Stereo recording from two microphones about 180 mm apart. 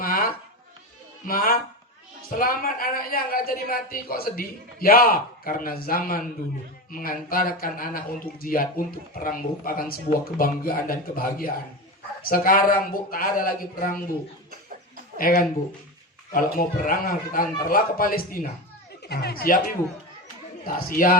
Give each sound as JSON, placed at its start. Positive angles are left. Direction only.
{"t": 0.0, "sound": "a sound", "side_deg": 55}
{"t": 1.3, "sound": "speech", "side_deg": 55}
{"t": 15.2, "sound": "speech", "side_deg": 50}
{"t": 20.7, "sound": "speech", "side_deg": 55}